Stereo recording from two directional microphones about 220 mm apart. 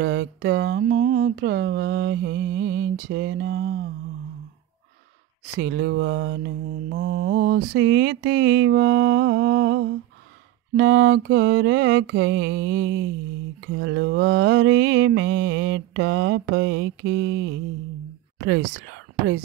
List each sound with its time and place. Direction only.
0.0 s speech: 55° right (ahead or behind)
5.6 s speech: 50° right (ahead or behind)
7.7 s speech: 55° right (ahead or behind)
13.7 s mantra: 55° right (ahead or behind)
18.7 s speech: 60° right (ahead or behind)